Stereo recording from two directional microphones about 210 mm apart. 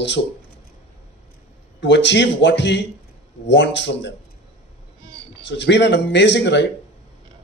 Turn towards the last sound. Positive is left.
turn(degrees=55)  # may be behind; listen again after turning